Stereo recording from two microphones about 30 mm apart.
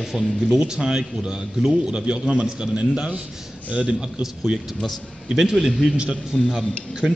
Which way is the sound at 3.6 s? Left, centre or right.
Right.